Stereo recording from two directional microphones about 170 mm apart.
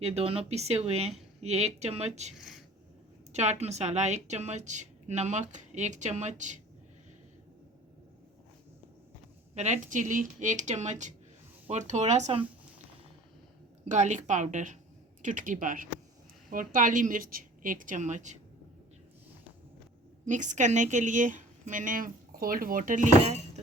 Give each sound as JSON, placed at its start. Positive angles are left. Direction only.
{"t": 0.0, "sound": "speech", "side_deg": -35}
{"t": 2.4, "sound": "speech", "side_deg": 0}
{"t": 3.3, "sound": "a woman's voice", "side_deg": -40}
{"t": 9.6, "sound": "a woman's voice", "side_deg": -40}
{"t": 13.8, "sound": "a woman's voice", "side_deg": -45}
{"t": 20.2, "sound": "a woman's voice", "side_deg": -45}